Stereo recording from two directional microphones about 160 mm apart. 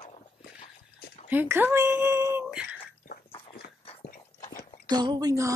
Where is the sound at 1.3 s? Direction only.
10° right (ahead or behind).